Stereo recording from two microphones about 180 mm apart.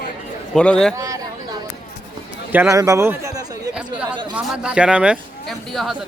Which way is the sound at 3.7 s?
5° right (ahead or behind).